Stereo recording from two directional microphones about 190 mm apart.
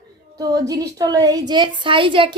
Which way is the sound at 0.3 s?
20° right (ahead or behind).